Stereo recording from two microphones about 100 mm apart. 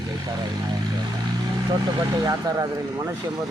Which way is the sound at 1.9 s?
40° right (ahead or behind).